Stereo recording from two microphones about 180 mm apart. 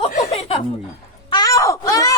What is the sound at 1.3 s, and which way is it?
Wail, 20° left (ahead or behind).